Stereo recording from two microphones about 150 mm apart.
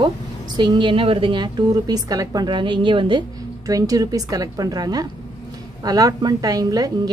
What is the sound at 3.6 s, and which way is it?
A woman's voice, 25° right (ahead or behind).